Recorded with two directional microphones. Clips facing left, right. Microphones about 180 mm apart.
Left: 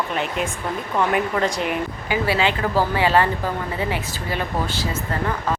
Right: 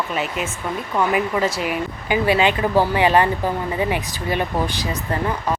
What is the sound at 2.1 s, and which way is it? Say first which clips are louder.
Speech: right 4 dB; 20° right (ahead or behind).